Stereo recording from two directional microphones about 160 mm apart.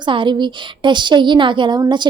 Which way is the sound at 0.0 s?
30° right (ahead or behind).